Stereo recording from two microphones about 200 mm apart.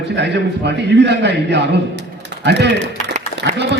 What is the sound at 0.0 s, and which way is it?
A man's voice, 60° right (ahead or behind).